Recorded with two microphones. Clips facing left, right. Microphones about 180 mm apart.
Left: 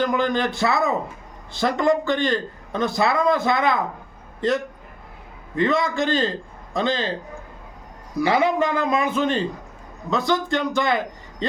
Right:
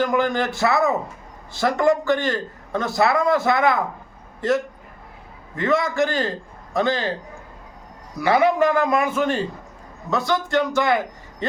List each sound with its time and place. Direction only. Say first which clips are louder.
0.0 s a man's voice: right 1 dB; 20° left (ahead or behind)
8.4 s a man's voice: right 6 dB; 20° left (ahead or behind)